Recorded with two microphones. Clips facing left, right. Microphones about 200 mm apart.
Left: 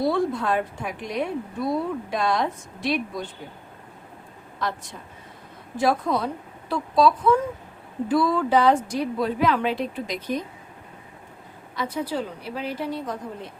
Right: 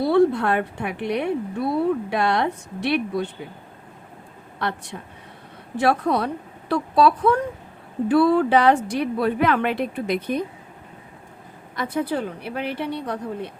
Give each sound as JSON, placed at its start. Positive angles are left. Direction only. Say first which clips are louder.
{"t": 0.0, "sound": "a woman's voice", "louder": "right 5 dB", "side_deg": -65}
{"t": 4.6, "sound": "a woman's voice", "louder": "right 2 dB", "side_deg": -65}
{"t": 11.8, "sound": "a woman's voice", "louder": "right 3 dB", "side_deg": -55}